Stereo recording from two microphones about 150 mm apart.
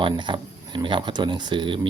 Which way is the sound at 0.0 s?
30° right (ahead or behind).